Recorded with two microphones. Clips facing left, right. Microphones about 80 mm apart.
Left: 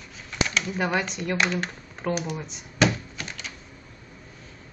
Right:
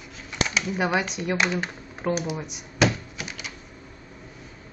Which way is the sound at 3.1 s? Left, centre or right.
Centre.